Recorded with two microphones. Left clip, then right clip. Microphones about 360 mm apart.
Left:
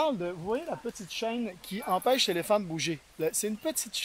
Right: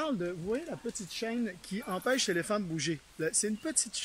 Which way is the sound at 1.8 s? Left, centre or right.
Left.